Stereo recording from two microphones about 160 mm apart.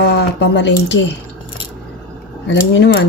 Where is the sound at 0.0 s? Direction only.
90° left.